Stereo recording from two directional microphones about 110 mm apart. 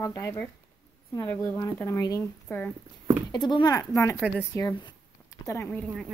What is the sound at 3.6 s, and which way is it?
A woman's voice, 30° left (ahead or behind).